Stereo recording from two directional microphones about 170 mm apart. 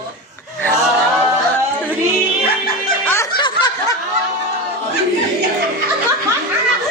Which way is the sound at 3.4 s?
25° left (ahead or behind).